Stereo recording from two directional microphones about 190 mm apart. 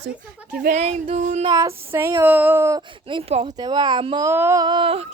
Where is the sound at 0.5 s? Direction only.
45° right (ahead or behind).